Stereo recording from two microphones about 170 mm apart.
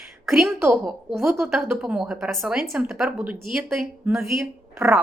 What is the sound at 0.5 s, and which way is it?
Speech, 15° right (ahead or behind).